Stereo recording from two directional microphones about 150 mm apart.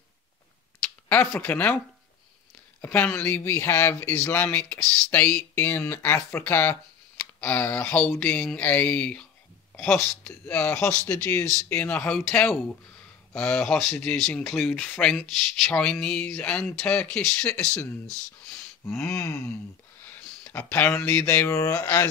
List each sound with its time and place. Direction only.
1.0 s speech: 10° left (ahead or behind)
2.8 s speech: 15° left (ahead or behind)
11.1 s a sound: 20° left (ahead or behind)
11.7 s speech: 10° left (ahead or behind)
18.9 s a sound: 15° left (ahead or behind)
20.1 s speech: 10° left (ahead or behind)